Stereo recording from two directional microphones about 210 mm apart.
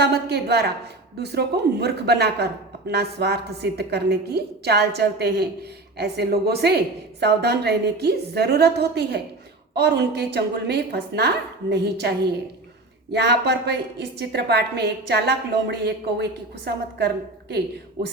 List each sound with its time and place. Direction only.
0.0 s speech: 50° right (ahead or behind)